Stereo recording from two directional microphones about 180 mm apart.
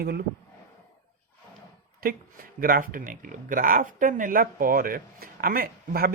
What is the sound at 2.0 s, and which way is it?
Speech, 50° right (ahead or behind).